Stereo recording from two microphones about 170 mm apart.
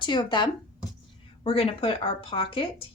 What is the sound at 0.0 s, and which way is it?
A woman's voice, 25° left (ahead or behind).